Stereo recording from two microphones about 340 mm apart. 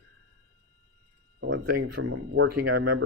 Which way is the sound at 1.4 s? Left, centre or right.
Right.